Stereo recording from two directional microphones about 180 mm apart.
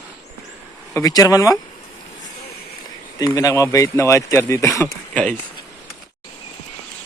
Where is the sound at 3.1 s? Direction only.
20° left (ahead or behind).